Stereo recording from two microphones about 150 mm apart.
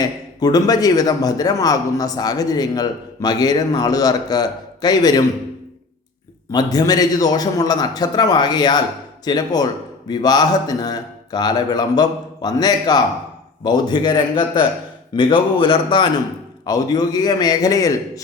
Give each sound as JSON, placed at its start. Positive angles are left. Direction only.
{"t": 0.0, "sound": "a man's voice", "side_deg": 25}
{"t": 6.5, "sound": "a man's voice", "side_deg": 25}